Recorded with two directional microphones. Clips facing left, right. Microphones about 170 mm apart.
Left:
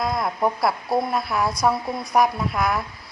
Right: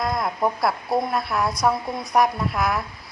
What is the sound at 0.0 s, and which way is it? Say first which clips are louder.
A woman's voice: left 1 dB; centre (ahead or behind).